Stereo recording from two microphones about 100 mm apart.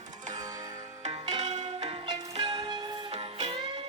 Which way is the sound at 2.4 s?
40° right (ahead or behind).